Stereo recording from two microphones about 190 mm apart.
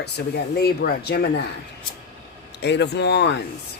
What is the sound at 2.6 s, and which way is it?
Speech, 65° left (ahead or behind).